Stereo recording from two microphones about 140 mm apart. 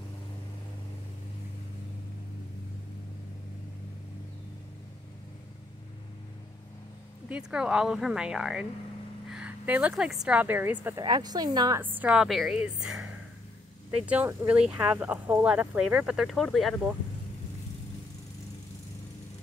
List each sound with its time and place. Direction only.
7.2 s speech: 10° right (ahead or behind)
9.3 s a sound: 10° right (ahead or behind)
10.2 s speech: 10° right (ahead or behind)
11.0 s a woman's voice: 30° right (ahead or behind)
11.8 s speech: 10° right (ahead or behind)